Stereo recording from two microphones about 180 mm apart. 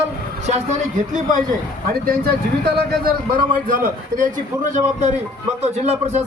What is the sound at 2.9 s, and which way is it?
A man's voice, 55° right (ahead or behind).